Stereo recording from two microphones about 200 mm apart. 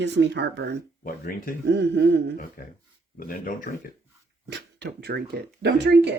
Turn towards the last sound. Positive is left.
turn(degrees=-55)  # may be behind; listen again after turning